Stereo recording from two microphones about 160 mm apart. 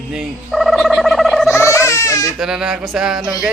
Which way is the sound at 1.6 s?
20° left (ahead or behind).